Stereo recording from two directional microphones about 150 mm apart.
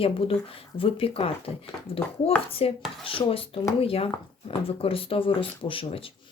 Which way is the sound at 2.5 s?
40° left (ahead or behind).